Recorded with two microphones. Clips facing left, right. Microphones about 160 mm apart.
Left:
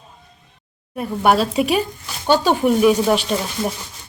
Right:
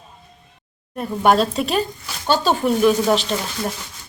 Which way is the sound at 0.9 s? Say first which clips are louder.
Even; 10° left (ahead or behind).